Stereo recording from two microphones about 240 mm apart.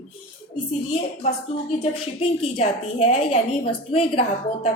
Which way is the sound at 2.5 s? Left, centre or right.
Left.